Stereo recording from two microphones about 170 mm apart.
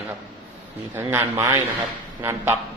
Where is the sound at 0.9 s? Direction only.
10° right (ahead or behind).